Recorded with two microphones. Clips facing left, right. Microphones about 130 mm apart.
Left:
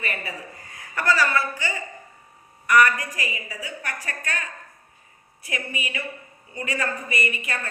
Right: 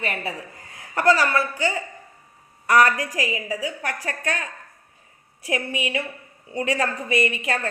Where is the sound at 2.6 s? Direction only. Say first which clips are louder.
Right 1 dB; 90° right.